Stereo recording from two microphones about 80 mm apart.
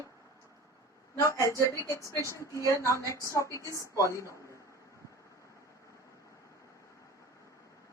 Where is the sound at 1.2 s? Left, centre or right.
Left.